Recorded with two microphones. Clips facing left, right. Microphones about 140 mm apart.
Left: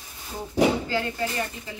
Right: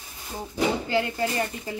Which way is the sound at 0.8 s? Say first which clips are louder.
Right 2 dB; 25° right (ahead or behind).